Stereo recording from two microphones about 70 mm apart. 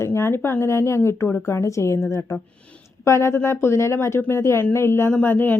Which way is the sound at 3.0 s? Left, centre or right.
Left.